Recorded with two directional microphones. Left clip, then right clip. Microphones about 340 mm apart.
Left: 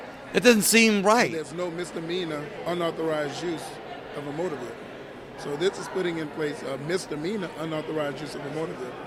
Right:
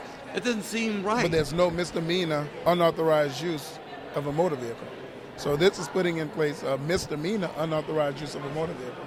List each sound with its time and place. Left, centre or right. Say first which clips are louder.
0.3 s a man's voice: left 11 dB; left
1.3 s a man's voice: right 7 dB; right
5.4 s speech: right 4 dB; right